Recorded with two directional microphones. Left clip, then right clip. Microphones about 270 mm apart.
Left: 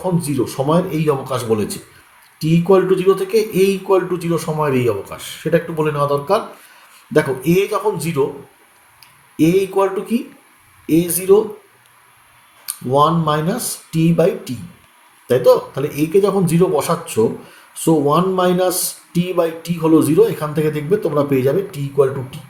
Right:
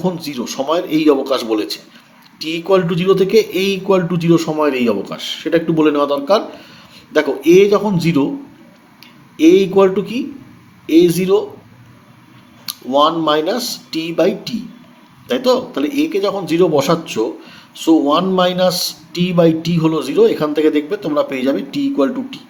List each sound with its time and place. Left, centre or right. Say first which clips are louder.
0.0 s a man's voice: left 2 dB; right
9.4 s a man's voice: right 5 dB; right
12.6 s a man's voice: right 1 dB; right